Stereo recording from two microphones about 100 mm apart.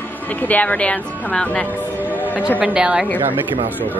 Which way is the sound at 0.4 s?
15° left (ahead or behind).